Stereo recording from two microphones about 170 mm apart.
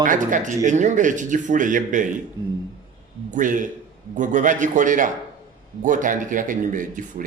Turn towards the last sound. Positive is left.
turn(degrees=-50)  # may be behind; listen again after turning